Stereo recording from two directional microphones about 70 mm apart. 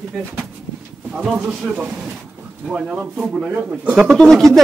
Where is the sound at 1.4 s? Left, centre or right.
Right.